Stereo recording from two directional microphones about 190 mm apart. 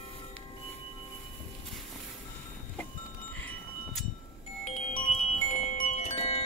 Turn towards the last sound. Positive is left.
turn(degrees=30)  # may be behind; listen again after turning